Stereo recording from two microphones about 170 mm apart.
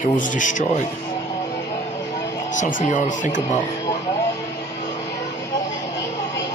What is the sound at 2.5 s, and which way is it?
Speech, 45° left (ahead or behind).